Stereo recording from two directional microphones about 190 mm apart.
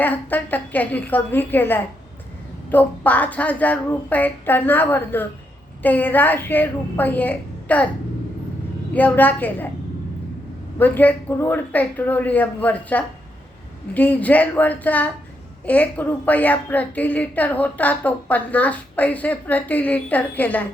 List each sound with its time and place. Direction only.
0.0 s a woman's voice: 10° left (ahead or behind)
8.9 s a woman's voice: 10° left (ahead or behind)
10.8 s a woman's voice: 10° left (ahead or behind)